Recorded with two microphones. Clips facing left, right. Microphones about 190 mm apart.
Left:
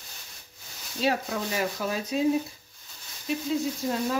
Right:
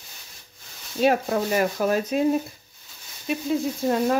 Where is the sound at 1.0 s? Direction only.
50° right (ahead or behind).